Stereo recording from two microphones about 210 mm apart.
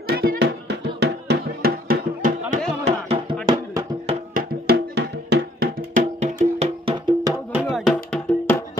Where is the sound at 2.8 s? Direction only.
30° right (ahead or behind).